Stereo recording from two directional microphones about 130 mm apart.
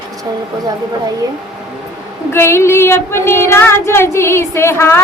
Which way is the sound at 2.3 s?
20° left (ahead or behind).